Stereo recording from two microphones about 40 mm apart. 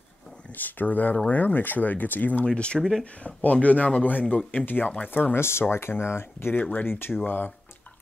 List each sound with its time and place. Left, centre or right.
0.6 s speech: left
2.4 s speech: left
2.8 s speech: centre
3.3 s speech: left
5.3 s speech: left
6.5 s speech: left
6.9 s speech: left